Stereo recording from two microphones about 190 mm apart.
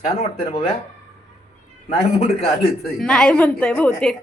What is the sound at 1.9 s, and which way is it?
Speech, 35° left (ahead or behind).